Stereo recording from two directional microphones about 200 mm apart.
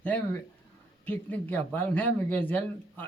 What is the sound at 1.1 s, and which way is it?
Speech, 10° left (ahead or behind).